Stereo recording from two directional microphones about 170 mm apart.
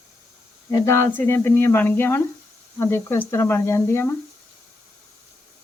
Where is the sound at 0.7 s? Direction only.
15° left (ahead or behind).